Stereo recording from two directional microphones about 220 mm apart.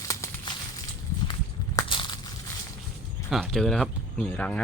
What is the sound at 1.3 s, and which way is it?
Crushing, 20° left (ahead or behind).